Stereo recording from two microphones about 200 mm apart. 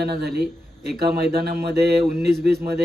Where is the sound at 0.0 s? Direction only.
55° right (ahead or behind).